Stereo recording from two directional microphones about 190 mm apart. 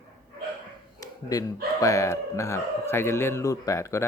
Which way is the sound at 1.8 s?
15° left (ahead or behind).